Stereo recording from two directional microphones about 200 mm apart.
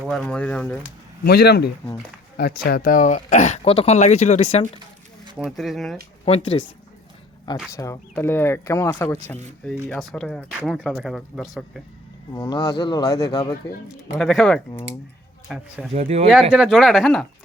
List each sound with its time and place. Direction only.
0.1 s speech: 5° left (ahead or behind)
1.2 s speech: 55° left (ahead or behind); by 4.6 s 30° left (ahead or behind)
5.4 s speech: centre (ahead or behind)
6.2 s speech: 30° left (ahead or behind)
7.8 s speech: 15° left (ahead or behind)
12.3 s speech: 25° left (ahead or behind)
13.8 s speech: centre (ahead or behind)
15.9 s speech: 30° right (ahead or behind)
16.3 s speech: centre (ahead or behind)